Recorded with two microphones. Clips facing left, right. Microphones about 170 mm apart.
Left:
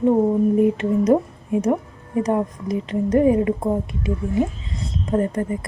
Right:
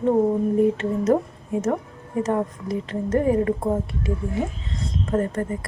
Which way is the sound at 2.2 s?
15° left (ahead or behind).